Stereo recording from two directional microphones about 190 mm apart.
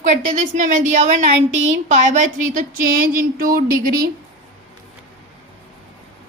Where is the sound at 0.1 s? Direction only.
40° right (ahead or behind).